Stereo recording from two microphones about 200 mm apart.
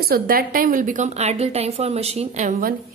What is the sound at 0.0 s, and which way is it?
A woman's voice, 50° right (ahead or behind).